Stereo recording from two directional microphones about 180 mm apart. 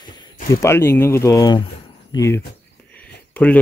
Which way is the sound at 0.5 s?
15° left (ahead or behind).